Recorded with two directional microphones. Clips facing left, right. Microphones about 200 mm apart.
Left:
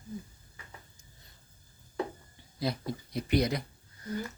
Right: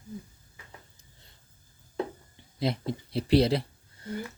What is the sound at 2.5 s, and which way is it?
Speech, 25° right (ahead or behind).